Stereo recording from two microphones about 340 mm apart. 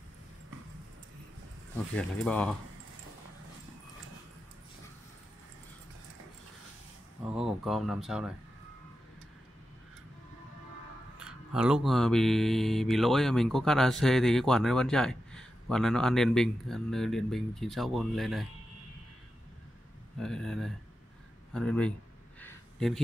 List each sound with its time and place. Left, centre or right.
2.0 s mantra: centre
7.2 s mantra: centre
11.1 s mantra: centre
20.2 s mantra: centre
22.4 s a sound: centre